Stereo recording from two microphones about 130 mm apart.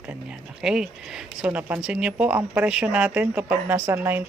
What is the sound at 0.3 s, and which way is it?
A woman's voice, 5° right (ahead or behind).